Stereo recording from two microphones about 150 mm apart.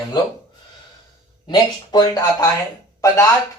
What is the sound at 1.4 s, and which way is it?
Speech, 25° left (ahead or behind).